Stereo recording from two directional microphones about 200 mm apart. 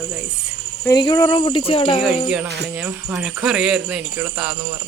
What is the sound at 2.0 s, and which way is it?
Speech, 5° right (ahead or behind).